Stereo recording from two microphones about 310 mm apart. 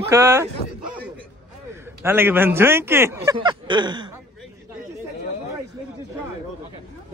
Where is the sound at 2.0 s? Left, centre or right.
Centre.